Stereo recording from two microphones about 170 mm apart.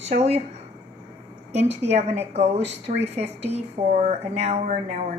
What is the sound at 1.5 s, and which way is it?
Speech, 40° right (ahead or behind).